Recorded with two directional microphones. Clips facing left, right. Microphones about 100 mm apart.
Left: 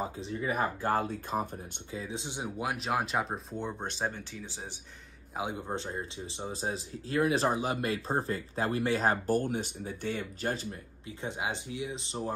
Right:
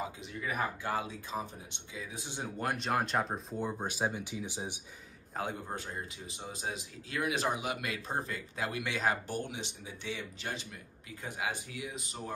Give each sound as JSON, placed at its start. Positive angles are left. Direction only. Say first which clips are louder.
{"t": 0.0, "sound": "speech", "louder": "left 5 dB", "side_deg": 30}
{"t": 0.8, "sound": "speech", "louder": "left 6 dB", "side_deg": 50}
{"t": 2.0, "sound": "speech", "louder": "left 4 dB", "side_deg": 25}
{"t": 2.6, "sound": "speech", "louder": "even", "side_deg": 5}
{"t": 5.3, "sound": "speech", "louder": "left 3 dB", "side_deg": 15}
{"t": 11.2, "sound": "speech", "louder": "left 2 dB", "side_deg": 25}